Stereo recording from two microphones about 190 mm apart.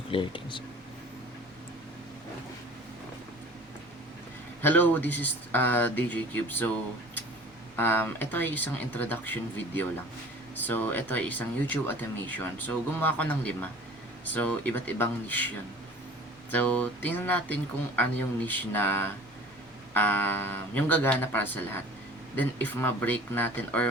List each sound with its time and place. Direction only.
0.1 s speech: 25° left (ahead or behind)
4.6 s speech: 10° left (ahead or behind)
7.8 s speech: 10° left (ahead or behind)